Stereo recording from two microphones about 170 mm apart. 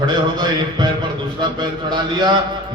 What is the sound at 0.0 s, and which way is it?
Speech, 25° right (ahead or behind).